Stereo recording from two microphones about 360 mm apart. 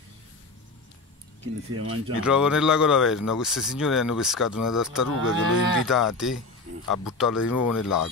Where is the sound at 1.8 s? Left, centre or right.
Right.